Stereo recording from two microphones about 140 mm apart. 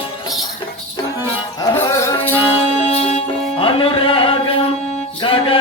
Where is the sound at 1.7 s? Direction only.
15° left (ahead or behind).